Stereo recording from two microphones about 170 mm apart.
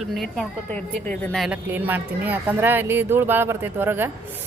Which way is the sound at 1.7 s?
10° right (ahead or behind).